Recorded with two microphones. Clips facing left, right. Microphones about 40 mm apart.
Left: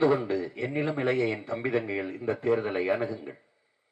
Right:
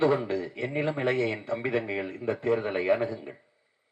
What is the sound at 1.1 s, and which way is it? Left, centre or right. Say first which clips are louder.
A man's voice: even; right.